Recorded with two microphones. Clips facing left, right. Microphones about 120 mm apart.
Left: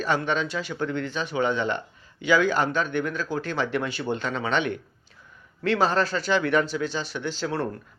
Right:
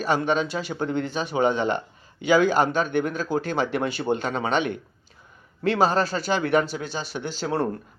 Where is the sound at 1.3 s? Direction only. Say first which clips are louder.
Right 3 dB; 45° right (ahead or behind).